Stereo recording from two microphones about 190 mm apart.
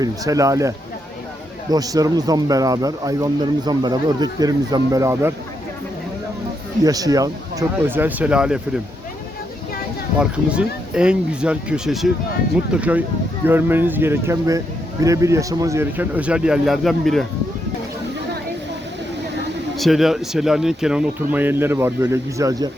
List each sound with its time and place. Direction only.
0.0 s speech: 15° right (ahead or behind)
1.7 s a man's voice: 20° right (ahead or behind)
6.8 s a man's voice: 20° right (ahead or behind)
10.2 s speech: 5° right (ahead or behind)
19.7 s speech: centre (ahead or behind); by 22.7 s 20° right (ahead or behind)